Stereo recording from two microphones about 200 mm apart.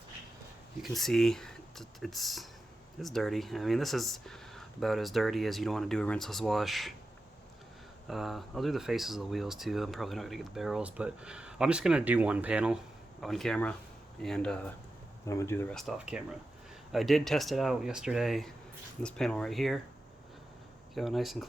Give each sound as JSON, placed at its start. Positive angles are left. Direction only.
{"t": 0.8, "sound": "speech", "side_deg": 0}
{"t": 8.0, "sound": "speech", "side_deg": 0}
{"t": 15.7, "sound": "speech", "side_deg": 0}
{"t": 20.9, "sound": "speech", "side_deg": 0}